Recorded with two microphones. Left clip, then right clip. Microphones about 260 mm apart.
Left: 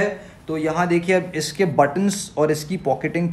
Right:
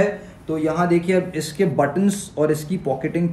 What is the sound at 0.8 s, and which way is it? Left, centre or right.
Speech, centre.